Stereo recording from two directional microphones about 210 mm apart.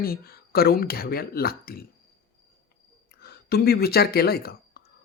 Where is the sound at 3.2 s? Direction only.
50° left (ahead or behind).